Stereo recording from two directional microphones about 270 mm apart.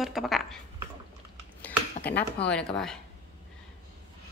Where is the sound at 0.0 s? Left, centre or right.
Centre.